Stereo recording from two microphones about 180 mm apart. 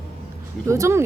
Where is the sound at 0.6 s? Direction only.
15° right (ahead or behind).